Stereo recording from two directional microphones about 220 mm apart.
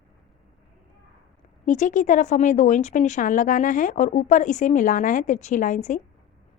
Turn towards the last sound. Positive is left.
turn(degrees=35)  # may be behind; listen again after turning